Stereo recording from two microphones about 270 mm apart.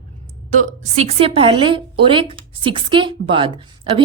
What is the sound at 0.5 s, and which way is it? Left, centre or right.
A woman's voice, right.